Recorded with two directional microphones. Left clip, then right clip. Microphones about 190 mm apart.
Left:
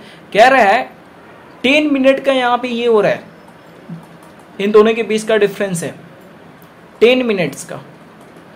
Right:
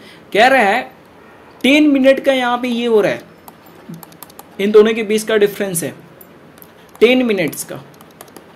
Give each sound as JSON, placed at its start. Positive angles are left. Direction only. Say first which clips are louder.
{"t": 0.3, "sound": "speech", "louder": "left 2 dB", "side_deg": -35}
{"t": 4.6, "sound": "speech", "louder": "even", "side_deg": -30}
{"t": 7.0, "sound": "speech", "louder": "left 1 dB", "side_deg": -35}